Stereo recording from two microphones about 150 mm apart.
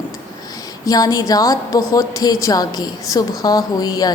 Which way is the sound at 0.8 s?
25° left (ahead or behind).